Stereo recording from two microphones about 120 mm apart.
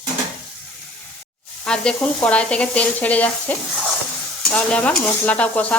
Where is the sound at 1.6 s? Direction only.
5° left (ahead or behind).